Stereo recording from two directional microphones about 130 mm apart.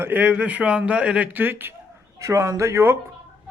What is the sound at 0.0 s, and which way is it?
Speech, 15° right (ahead or behind).